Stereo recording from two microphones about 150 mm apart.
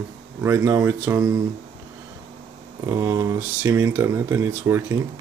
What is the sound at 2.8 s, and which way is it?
Speech, 20° right (ahead or behind).